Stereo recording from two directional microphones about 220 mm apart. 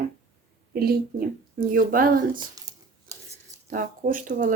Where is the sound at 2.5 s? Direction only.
15° right (ahead or behind).